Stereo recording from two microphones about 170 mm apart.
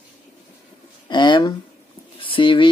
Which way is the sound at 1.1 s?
25° left (ahead or behind).